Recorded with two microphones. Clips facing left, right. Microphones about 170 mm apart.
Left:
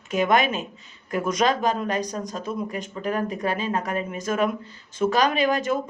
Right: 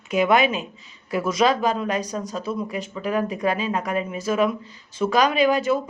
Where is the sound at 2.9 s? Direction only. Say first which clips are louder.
Right 1 dB; 40° left (ahead or behind).